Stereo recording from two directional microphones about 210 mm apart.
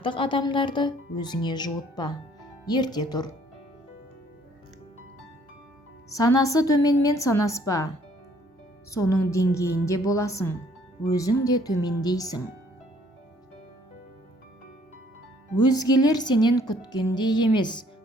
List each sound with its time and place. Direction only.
0.0 s speech: 25° left (ahead or behind)
6.1 s a woman's voice: 15° left (ahead or behind)
8.9 s a woman's voice: 15° left (ahead or behind)
15.6 s speech: 20° left (ahead or behind)